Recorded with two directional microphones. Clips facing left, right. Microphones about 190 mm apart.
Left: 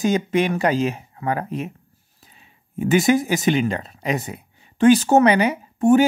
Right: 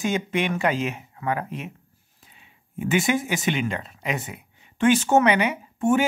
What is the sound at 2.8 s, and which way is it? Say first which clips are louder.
Speech: left 6 dB; 40° left (ahead or behind).